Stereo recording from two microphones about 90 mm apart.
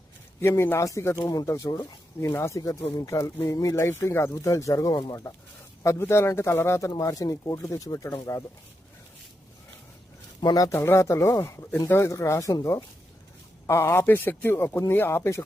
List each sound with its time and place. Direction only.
0.4 s speech: 25° left (ahead or behind); by 2.0 s 50° left (ahead or behind)
2.2 s speech: 30° left (ahead or behind)
5.8 s speech: 30° left (ahead or behind)
10.4 s speech: 40° left (ahead or behind)
10.8 s speech: 30° left (ahead or behind)
13.7 s speech: 30° left (ahead or behind)